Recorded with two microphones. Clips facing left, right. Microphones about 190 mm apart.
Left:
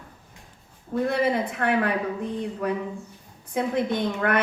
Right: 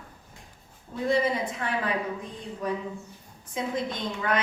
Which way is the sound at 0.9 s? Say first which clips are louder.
Left 2 dB; 60° left (ahead or behind).